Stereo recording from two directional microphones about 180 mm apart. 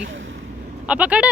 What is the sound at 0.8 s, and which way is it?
Speech, 5° right (ahead or behind).